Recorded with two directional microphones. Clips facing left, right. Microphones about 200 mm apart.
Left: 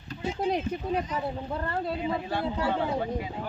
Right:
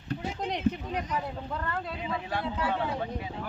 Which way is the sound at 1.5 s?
30° left (ahead or behind).